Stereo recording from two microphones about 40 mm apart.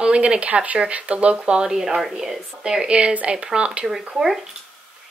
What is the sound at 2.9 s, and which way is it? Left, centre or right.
Speech, right.